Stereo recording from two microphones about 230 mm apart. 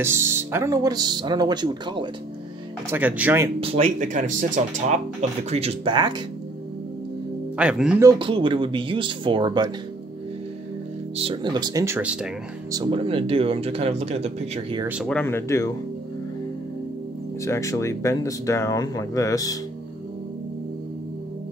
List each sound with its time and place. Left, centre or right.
0.0 s speech: centre
2.9 s speech: centre
3.6 s speech: right
7.5 s speech: centre
8.1 s speech: right
11.1 s speech: right; by 12.3 s centre
12.7 s speech: right
14.9 s speech: centre
15.1 s speech: centre
17.4 s speech: centre